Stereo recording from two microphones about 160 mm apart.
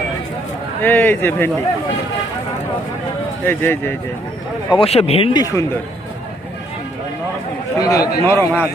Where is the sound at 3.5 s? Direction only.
15° left (ahead or behind).